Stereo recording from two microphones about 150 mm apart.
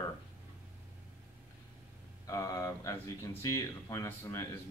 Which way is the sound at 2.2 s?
25° left (ahead or behind).